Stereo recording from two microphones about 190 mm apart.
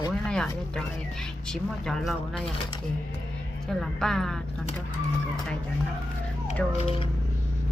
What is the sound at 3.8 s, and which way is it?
Speech, centre (ahead or behind).